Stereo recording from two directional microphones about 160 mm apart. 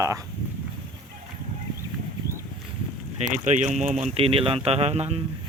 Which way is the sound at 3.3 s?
50° right (ahead or behind).